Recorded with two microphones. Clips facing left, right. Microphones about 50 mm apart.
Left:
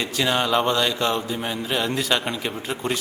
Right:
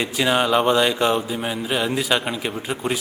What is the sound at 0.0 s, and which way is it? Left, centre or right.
A man's voice, centre.